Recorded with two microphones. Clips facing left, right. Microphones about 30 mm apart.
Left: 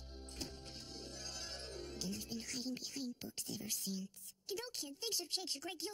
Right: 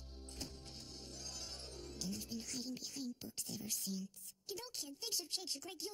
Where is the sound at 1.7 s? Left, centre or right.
Left.